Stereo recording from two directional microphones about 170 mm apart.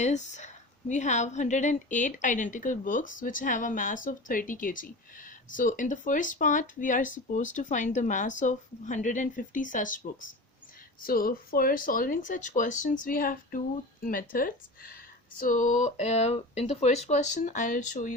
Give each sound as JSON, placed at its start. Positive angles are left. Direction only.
{"t": 0.0, "sound": "a woman's voice", "side_deg": 45}